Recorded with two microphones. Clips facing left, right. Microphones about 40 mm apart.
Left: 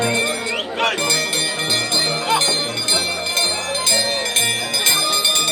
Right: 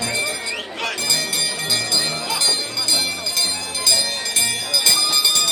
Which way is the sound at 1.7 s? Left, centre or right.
Left.